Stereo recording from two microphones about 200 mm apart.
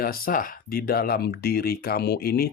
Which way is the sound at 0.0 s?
45° left (ahead or behind).